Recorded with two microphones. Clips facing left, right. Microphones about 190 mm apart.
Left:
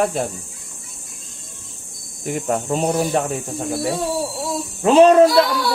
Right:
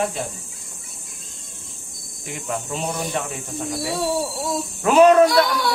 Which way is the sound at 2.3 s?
45° left (ahead or behind).